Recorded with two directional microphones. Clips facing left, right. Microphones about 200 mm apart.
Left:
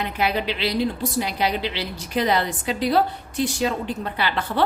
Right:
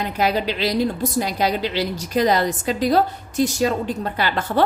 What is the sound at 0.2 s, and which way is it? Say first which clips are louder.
A woman's voice: right 3 dB; 40° right (ahead or behind).